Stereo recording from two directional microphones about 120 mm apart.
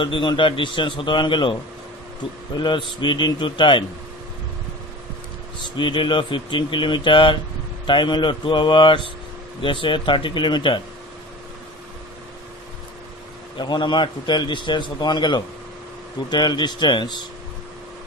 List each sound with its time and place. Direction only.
0.0 s a man's voice: 45° left (ahead or behind)
5.8 s a man's voice: 40° left (ahead or behind)
13.6 s a man's voice: 40° left (ahead or behind)